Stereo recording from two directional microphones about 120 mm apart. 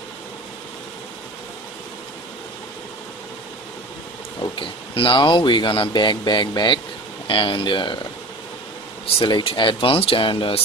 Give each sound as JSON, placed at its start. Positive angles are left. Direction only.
{"t": 4.4, "sound": "speech", "side_deg": 45}
{"t": 9.0, "sound": "speech", "side_deg": 45}